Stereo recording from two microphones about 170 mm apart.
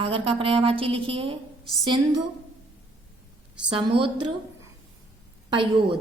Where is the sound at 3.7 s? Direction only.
30° right (ahead or behind).